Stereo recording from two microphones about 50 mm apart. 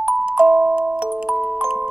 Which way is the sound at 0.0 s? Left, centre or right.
Right.